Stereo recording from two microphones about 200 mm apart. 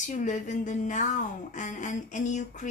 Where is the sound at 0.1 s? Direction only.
40° left (ahead or behind).